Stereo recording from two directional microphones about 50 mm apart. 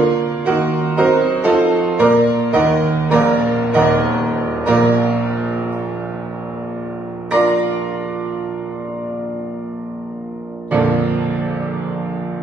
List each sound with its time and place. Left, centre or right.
0.0 s music: right
7.3 s music: right
10.7 s music: right